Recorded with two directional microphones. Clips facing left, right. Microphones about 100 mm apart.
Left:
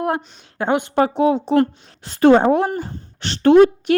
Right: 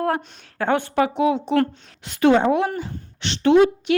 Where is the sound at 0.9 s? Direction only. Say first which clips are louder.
Left 5 dB; 35° left (ahead or behind).